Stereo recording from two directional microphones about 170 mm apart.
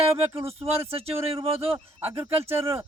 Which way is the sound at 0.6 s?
35° right (ahead or behind).